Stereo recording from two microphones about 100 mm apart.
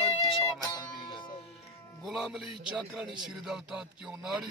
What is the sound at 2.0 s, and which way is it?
A man's voice, 5° right (ahead or behind).